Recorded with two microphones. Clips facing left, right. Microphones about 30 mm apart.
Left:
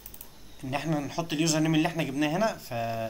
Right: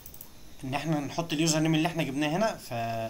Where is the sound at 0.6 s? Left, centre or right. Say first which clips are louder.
Even; centre.